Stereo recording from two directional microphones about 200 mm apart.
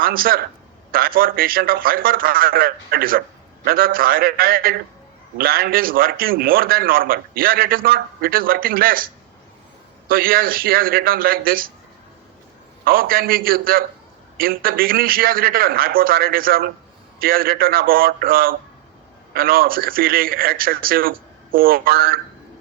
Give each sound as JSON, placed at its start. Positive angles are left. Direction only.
{"t": 0.0, "sound": "a man's voice", "side_deg": -45}
{"t": 10.1, "sound": "a man's voice", "side_deg": -45}
{"t": 12.8, "sound": "a man's voice", "side_deg": -45}